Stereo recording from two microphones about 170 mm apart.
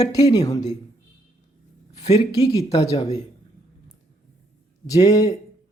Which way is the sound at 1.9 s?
40° left (ahead or behind).